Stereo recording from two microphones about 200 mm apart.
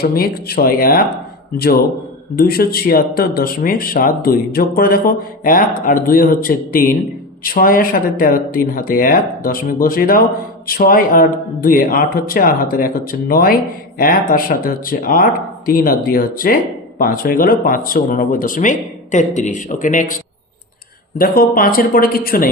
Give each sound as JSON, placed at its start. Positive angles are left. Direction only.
{"t": 0.0, "sound": "speech", "side_deg": 50}
{"t": 2.3, "sound": "speech", "side_deg": 50}
{"t": 21.2, "sound": "speech", "side_deg": 45}